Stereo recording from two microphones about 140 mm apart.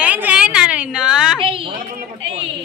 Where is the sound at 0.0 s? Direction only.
10° right (ahead or behind).